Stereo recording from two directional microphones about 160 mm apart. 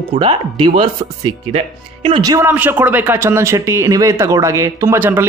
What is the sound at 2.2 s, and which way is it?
Speech, 25° right (ahead or behind).